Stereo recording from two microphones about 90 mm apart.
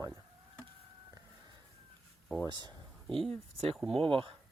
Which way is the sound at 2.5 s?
50° right (ahead or behind).